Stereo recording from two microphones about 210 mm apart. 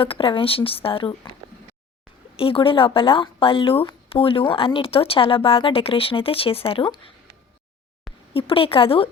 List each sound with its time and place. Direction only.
0.0 s a woman's voice: 25° left (ahead or behind)
2.3 s a woman's voice: 25° left (ahead or behind)
8.3 s a woman's voice: 25° left (ahead or behind)